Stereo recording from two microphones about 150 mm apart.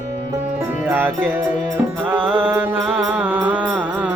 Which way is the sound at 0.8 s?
10° right (ahead or behind).